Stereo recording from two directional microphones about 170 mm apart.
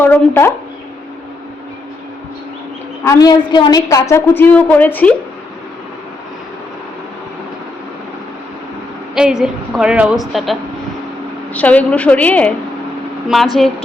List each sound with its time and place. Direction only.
0.0 s speech: 15° left (ahead or behind)
3.0 s a woman's voice: 20° left (ahead or behind)
9.1 s a woman's voice: 5° right (ahead or behind)